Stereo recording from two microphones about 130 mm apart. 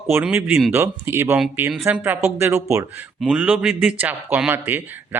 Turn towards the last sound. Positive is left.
turn(degrees=-15)  # may be behind; listen again after turning